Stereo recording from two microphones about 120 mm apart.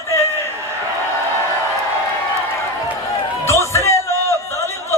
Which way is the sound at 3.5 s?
20° left (ahead or behind).